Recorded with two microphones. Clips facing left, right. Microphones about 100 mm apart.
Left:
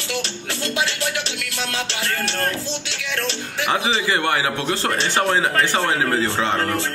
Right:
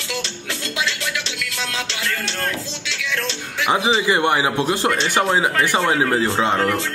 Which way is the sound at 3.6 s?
25° right (ahead or behind).